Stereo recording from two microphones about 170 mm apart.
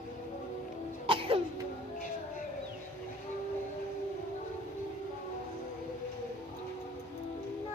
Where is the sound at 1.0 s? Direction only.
30° right (ahead or behind).